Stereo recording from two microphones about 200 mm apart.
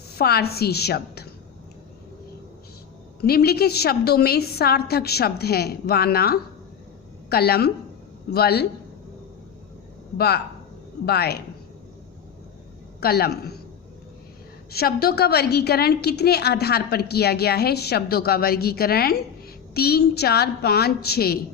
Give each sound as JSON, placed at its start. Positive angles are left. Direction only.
{"t": 0.2, "sound": "a woman's voice", "side_deg": 50}
{"t": 3.2, "sound": "a woman's voice", "side_deg": 50}
{"t": 10.2, "sound": "a woman's voice", "side_deg": 50}
{"t": 13.0, "sound": "a woman's voice", "side_deg": 50}
{"t": 14.7, "sound": "a woman's voice", "side_deg": 50}